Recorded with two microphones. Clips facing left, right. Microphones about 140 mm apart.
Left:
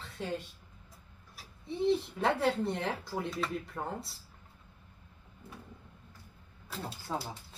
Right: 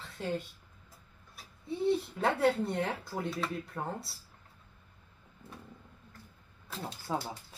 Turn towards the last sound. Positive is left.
turn(degrees=-10)  # may be behind; listen again after turning